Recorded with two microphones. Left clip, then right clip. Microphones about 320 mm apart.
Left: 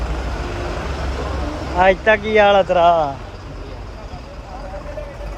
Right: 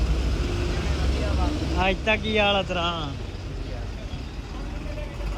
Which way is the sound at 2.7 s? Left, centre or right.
Left.